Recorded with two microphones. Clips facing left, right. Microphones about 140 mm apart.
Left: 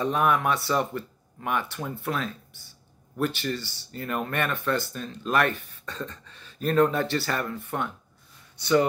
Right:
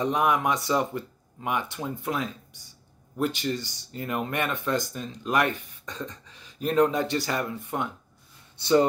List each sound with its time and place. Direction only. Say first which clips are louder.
0.0 s speech: even; 15° right (ahead or behind)
8.5 s speech: right 1 dB; 30° right (ahead or behind)